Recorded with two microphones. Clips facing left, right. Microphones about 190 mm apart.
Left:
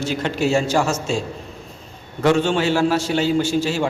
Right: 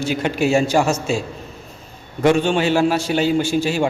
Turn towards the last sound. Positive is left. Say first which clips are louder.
# right 1 dB
turn(degrees=-15)  # may be behind; listen again after turning